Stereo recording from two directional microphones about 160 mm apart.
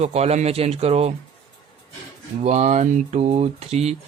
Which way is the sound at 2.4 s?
45° right (ahead or behind).